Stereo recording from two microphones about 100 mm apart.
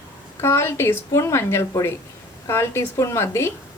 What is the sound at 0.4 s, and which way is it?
A woman's voice, 25° left (ahead or behind).